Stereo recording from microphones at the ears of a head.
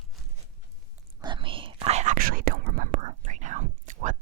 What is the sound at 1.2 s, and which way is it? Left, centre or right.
Whispering, right.